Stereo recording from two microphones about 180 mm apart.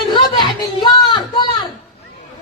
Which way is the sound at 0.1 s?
25° left (ahead or behind).